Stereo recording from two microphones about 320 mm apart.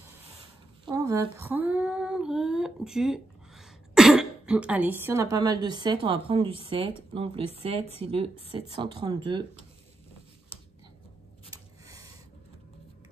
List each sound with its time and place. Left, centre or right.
0.8 s female singing: centre
7.2 s speech: centre
11.8 s a sound: centre